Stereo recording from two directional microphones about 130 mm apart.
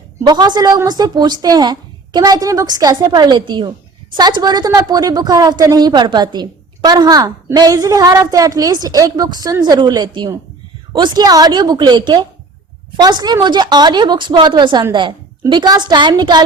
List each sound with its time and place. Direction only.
0.3 s a woman's voice: 30° right (ahead or behind)